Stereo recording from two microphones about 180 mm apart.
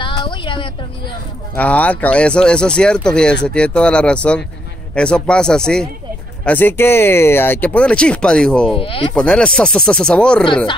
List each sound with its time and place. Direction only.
0.0 s a sound: 25° left (ahead or behind)
1.5 s speech: 10° left (ahead or behind)
8.7 s speech: 30° left (ahead or behind)
9.1 s speech: 5° left (ahead or behind)